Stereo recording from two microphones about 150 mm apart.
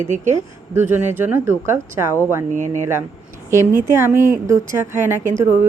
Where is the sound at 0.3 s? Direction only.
15° right (ahead or behind).